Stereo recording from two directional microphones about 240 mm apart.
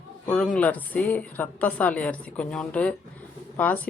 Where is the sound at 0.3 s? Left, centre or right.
Centre.